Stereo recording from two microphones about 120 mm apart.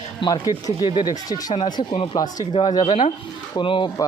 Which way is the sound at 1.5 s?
50° left (ahead or behind).